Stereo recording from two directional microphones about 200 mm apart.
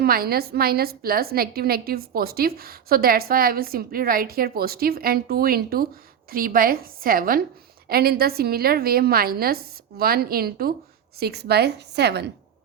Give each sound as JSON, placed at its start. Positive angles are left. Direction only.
{"t": 0.0, "sound": "a woman's voice", "side_deg": -50}